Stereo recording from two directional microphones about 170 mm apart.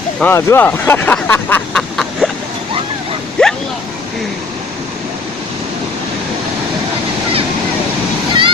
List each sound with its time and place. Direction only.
0.2 s speech: 15° left (ahead or behind)
3.4 s vehicle: 5° left (ahead or behind)
8.3 s waves: 30° right (ahead or behind)